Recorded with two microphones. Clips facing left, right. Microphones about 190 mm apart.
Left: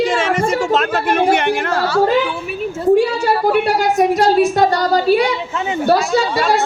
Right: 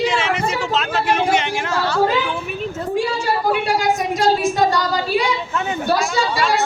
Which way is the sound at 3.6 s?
60° left (ahead or behind).